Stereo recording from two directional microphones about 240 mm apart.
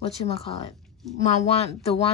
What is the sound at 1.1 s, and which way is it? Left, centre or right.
Speech, left.